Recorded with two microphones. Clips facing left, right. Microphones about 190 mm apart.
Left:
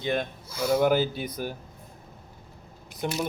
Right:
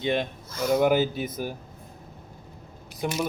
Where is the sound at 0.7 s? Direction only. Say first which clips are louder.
Right 1 dB; 10° right (ahead or behind).